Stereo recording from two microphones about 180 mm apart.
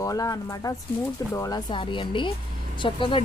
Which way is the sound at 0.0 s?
20° left (ahead or behind).